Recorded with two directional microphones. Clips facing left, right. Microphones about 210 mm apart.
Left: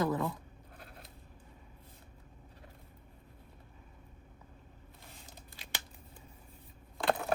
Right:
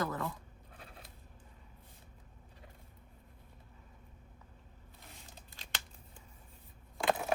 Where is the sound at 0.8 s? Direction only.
Centre (ahead or behind).